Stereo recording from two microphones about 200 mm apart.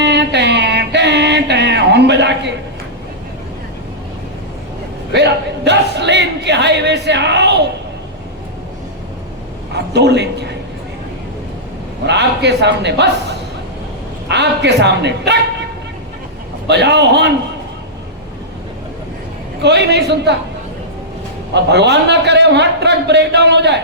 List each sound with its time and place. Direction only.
0.0 s a sound: 60° right (ahead or behind)
5.1 s a man's voice: 60° right (ahead or behind)
9.7 s a man's voice: 60° right (ahead or behind)
12.0 s a man's voice: 60° right (ahead or behind)
16.6 s a man's voice: 60° right (ahead or behind)
19.6 s a man's voice: 60° right (ahead or behind)
21.5 s a man's voice: 60° right (ahead or behind)